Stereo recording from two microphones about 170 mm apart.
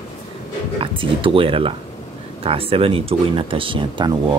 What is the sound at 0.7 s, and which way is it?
Speech, 30° right (ahead or behind).